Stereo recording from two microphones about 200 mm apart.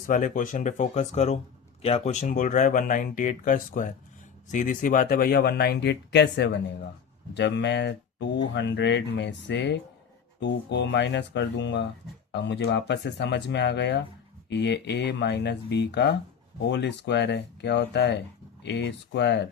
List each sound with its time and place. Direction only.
0.1 s speech: 40° left (ahead or behind); by 19.5 s 60° left (ahead or behind)